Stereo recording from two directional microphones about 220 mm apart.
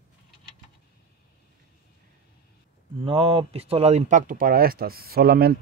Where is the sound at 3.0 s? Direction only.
25° right (ahead or behind).